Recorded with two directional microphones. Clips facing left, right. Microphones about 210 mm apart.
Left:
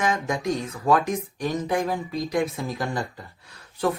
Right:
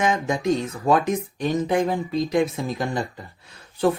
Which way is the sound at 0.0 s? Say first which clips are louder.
Right 3 dB; 25° right (ahead or behind).